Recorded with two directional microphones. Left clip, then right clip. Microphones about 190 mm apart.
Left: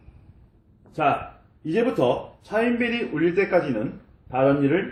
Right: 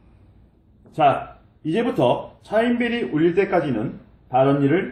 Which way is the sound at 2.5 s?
25° right (ahead or behind).